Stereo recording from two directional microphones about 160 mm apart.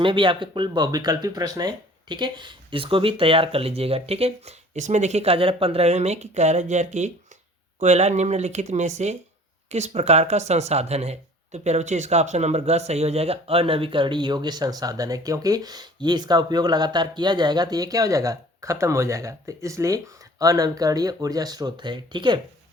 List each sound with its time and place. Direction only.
0.0 s speech: 30° right (ahead or behind)